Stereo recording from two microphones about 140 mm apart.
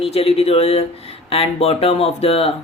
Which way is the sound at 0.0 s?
45° left (ahead or behind).